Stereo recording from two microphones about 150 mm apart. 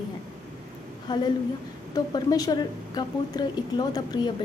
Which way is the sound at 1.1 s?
30° left (ahead or behind).